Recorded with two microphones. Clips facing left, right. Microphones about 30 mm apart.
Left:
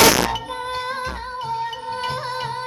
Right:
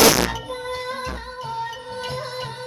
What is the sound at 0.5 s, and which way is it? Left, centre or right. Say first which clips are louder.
Music: left 2 dB; left.